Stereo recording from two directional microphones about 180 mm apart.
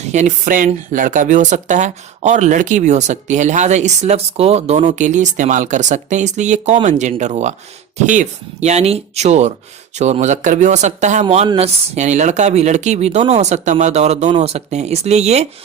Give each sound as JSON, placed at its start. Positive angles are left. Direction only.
{"t": 0.1, "sound": "speech", "side_deg": -40}